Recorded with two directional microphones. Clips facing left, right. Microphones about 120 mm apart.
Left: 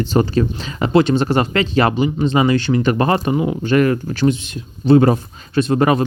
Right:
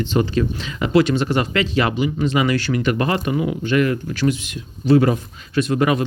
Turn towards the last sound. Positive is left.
turn(degrees=35)  # may be behind; listen again after turning